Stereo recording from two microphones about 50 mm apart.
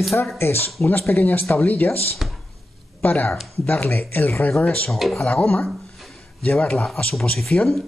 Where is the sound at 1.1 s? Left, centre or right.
Left.